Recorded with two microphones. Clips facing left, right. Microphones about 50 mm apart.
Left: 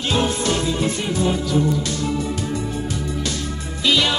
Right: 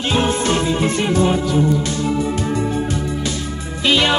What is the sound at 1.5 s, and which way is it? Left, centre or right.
Music, right.